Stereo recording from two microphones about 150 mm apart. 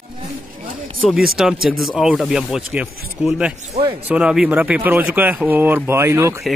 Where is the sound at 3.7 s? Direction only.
35° right (ahead or behind).